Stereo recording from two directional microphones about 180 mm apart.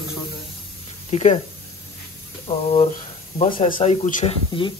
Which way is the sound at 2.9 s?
50° left (ahead or behind).